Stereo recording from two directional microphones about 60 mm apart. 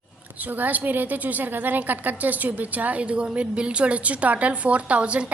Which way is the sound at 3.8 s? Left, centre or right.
Right.